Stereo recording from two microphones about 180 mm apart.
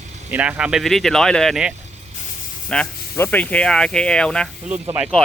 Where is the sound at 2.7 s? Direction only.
10° left (ahead or behind).